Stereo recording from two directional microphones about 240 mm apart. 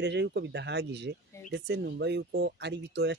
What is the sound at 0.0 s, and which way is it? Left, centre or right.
Speech, right.